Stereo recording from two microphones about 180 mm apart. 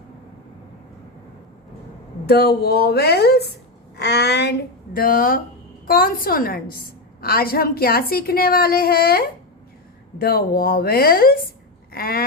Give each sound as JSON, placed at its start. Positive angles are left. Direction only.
{"t": 2.2, "sound": "a woman's voice", "side_deg": 65}
{"t": 4.9, "sound": "a woman's voice", "side_deg": 50}